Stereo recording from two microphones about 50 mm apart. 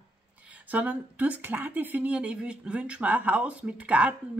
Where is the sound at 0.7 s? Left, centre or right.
Right.